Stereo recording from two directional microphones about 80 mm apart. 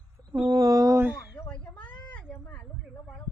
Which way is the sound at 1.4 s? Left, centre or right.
Centre.